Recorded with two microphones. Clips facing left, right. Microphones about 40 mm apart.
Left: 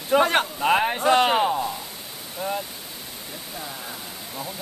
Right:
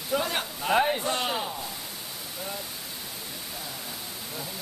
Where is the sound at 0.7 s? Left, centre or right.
Left.